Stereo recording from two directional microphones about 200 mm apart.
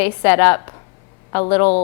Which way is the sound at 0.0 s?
10° left (ahead or behind).